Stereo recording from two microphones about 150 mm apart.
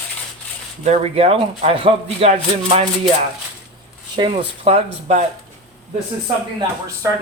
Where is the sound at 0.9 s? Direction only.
40° right (ahead or behind).